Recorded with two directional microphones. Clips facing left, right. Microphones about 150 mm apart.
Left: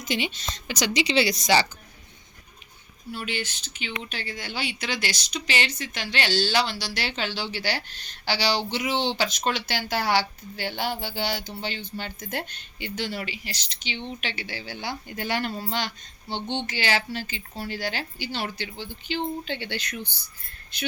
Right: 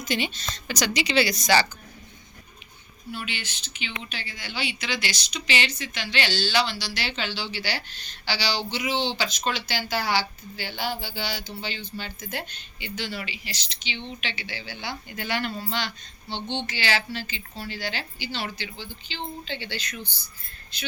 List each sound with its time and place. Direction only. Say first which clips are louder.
0.0 s a woman's voice: even; 20° left (ahead or behind)
3.1 s speech: left 3 dB; 40° left (ahead or behind); by 20.9 s 60° left (ahead or behind)